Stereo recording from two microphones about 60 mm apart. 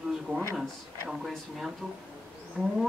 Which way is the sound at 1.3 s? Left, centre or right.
Centre.